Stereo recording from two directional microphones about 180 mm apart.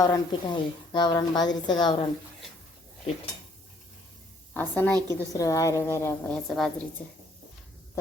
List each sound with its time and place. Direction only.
0.0 s a woman's voice: 20° left (ahead or behind)
4.5 s a woman's voice: 10° left (ahead or behind)
6.3 s a woman's voice: 5° left (ahead or behind)